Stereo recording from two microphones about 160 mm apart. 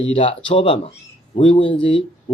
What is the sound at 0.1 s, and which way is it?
Speech, 35° left (ahead or behind).